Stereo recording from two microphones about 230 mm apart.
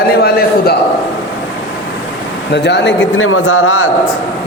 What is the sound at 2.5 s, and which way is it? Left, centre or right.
A man's voice, left.